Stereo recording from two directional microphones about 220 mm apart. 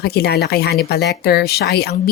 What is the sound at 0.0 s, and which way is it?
A woman's voice, 45° left (ahead or behind).